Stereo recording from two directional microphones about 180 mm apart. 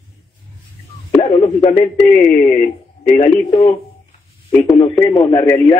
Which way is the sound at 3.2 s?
30° left (ahead or behind).